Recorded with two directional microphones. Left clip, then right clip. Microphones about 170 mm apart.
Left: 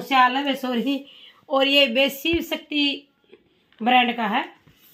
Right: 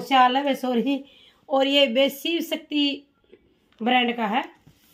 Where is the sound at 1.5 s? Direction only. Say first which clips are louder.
Left 1 dB; 5° right (ahead or behind).